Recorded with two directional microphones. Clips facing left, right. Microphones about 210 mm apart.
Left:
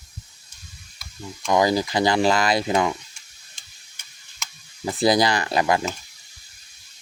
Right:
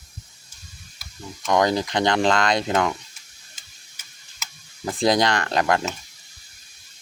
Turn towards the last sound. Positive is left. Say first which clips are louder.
# even
turn(degrees=5)  # may be behind; listen again after turning